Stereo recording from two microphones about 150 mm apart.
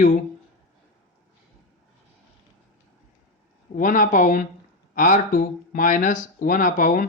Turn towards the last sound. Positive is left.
turn(degrees=65)  # may be behind; listen again after turning